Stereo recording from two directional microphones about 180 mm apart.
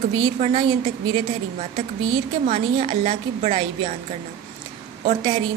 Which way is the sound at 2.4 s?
35° right (ahead or behind).